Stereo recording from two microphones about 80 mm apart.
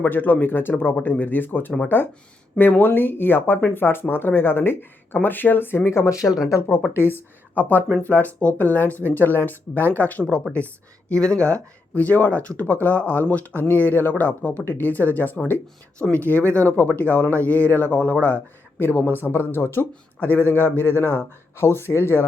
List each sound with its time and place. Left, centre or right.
0.0 s speech: left
6.9 s speech: left